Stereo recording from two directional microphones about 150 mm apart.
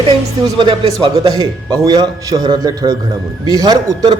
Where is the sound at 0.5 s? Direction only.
35° right (ahead or behind).